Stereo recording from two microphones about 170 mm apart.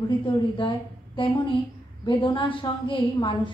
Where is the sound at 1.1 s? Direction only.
30° left (ahead or behind).